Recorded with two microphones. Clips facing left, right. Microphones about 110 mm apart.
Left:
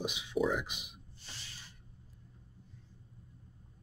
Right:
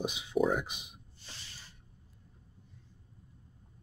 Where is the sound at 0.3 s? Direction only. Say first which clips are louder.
Right 3 dB; 45° right (ahead or behind).